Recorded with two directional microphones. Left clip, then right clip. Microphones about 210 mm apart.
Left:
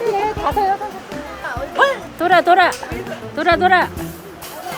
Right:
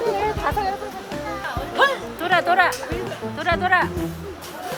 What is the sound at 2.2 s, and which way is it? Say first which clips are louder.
Speech: left 6 dB; 35° left (ahead or behind).